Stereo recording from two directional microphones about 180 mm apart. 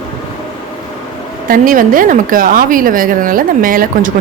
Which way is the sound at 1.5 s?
50° right (ahead or behind).